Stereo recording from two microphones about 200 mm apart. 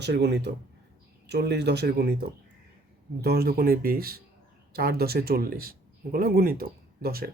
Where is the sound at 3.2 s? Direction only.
50° right (ahead or behind).